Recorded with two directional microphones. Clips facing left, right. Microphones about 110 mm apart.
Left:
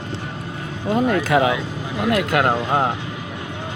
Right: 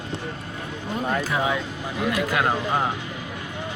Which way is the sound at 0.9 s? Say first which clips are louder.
Left 8 dB; 85° left.